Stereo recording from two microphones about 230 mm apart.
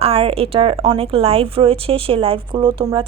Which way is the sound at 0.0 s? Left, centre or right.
Right.